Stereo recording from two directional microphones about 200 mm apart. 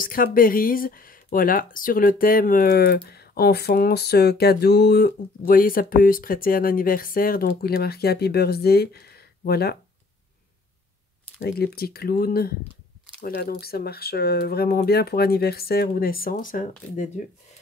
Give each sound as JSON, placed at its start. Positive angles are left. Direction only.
{"t": 0.0, "sound": "speech", "side_deg": 45}
{"t": 11.3, "sound": "speech", "side_deg": 50}